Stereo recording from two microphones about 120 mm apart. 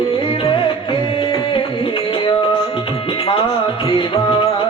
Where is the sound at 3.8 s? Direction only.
45° left (ahead or behind).